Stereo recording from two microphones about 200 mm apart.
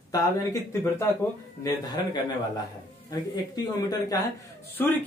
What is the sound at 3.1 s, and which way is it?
Speech, 20° left (ahead or behind).